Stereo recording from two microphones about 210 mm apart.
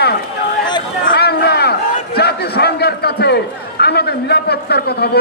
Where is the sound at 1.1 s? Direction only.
50° left (ahead or behind).